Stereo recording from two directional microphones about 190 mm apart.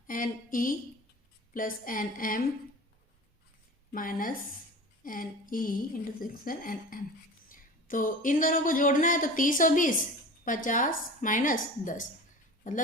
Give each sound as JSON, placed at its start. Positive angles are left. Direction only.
{"t": 0.1, "sound": "a woman's voice", "side_deg": 45}
{"t": 3.9, "sound": "a woman's voice", "side_deg": 45}